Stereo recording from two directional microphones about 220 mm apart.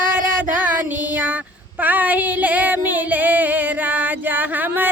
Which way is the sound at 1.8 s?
5° right (ahead or behind).